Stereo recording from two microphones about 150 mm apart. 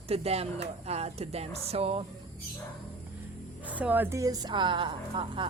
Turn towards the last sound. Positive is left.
turn(degrees=-35)  # may be behind; listen again after turning